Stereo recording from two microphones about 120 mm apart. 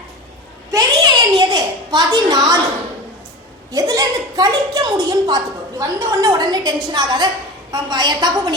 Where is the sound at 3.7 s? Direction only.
30° right (ahead or behind).